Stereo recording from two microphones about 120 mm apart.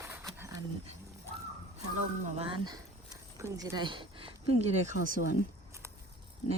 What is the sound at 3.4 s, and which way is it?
Speech, 25° right (ahead or behind).